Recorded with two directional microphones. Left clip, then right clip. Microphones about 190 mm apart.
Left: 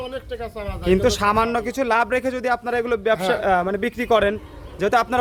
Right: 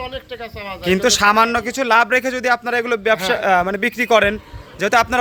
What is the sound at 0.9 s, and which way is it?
A man's voice, centre (ahead or behind).